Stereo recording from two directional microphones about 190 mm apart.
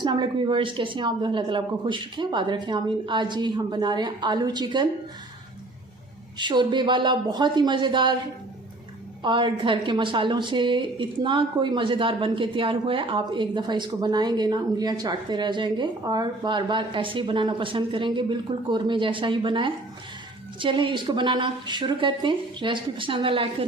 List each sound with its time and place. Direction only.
0.0 s a woman's voice: 25° right (ahead or behind)
6.4 s a woman's voice: 25° right (ahead or behind)
9.2 s a woman's voice: 25° right (ahead or behind)